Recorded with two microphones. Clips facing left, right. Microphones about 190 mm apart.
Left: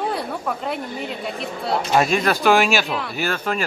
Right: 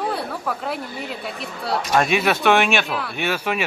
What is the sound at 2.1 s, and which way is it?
A man's voice, 5° right (ahead or behind).